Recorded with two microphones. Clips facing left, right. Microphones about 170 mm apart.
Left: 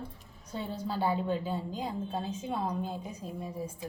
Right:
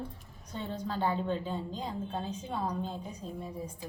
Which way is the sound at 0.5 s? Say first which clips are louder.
Left 1 dB; 10° left (ahead or behind).